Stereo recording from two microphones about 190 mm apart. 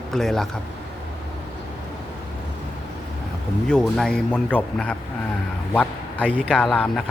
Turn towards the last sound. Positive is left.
turn(degrees=0)  # may be behind; listen again after turning